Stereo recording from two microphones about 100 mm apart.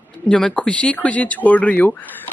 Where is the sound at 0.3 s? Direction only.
10° left (ahead or behind).